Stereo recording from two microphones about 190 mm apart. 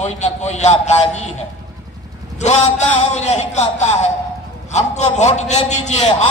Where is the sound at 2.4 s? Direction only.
35° left (ahead or behind).